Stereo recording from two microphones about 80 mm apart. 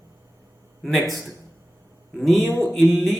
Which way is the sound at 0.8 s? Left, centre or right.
Centre.